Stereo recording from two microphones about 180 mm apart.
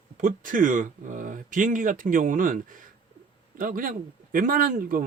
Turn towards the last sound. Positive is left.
turn(degrees=-50)  # may be behind; listen again after turning